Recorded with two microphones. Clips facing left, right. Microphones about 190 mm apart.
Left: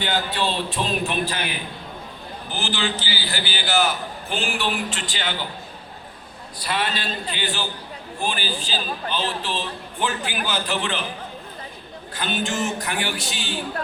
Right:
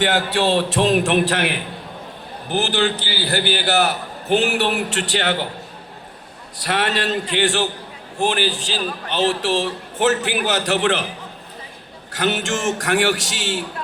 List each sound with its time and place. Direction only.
0.0 s a man's voice: 80° right
2.5 s a man's voice: 60° right (ahead or behind)
6.7 s a man's voice: 75° right (ahead or behind)
12.1 s a man's voice: 85° right